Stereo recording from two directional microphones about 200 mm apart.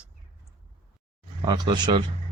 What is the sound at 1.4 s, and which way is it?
Speech, 20° right (ahead or behind).